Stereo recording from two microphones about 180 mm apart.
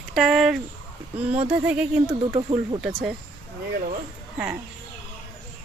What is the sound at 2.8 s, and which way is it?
Speech, centre (ahead or behind).